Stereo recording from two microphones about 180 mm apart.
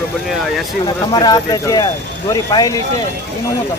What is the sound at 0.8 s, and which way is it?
Speech, 25° left (ahead or behind).